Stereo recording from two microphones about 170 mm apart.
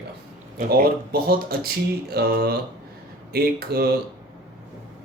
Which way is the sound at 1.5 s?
65° right (ahead or behind).